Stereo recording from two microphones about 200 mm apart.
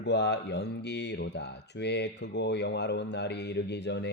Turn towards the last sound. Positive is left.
turn(degrees=60)  # may be behind; listen again after turning